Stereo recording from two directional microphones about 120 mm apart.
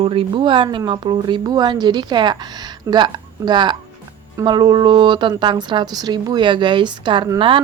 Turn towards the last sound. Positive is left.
turn(degrees=-45)  # may be behind; listen again after turning